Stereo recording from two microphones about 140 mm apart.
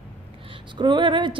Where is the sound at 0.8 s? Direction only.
35° right (ahead or behind).